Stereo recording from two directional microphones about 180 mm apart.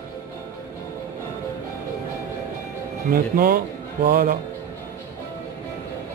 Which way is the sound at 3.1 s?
55° right (ahead or behind).